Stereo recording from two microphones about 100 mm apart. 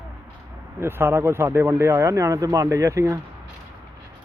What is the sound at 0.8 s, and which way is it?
Speech, 25° right (ahead or behind).